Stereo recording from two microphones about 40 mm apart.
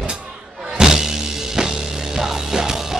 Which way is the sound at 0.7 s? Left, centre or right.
Centre.